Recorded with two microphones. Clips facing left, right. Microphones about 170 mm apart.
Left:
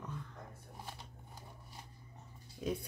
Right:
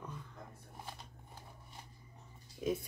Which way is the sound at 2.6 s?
Centre (ahead or behind).